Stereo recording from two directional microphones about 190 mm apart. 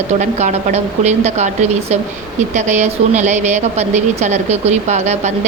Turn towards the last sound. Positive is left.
turn(degrees=-35)  # may be behind; listen again after turning